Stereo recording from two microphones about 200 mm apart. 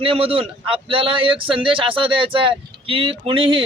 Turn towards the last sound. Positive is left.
turn(degrees=-25)  # may be behind; listen again after turning